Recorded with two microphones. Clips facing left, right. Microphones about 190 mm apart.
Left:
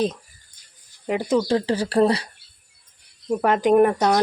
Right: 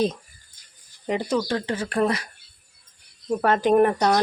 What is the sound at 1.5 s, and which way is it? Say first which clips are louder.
Speech: left 5 dB; 30° left (ahead or behind).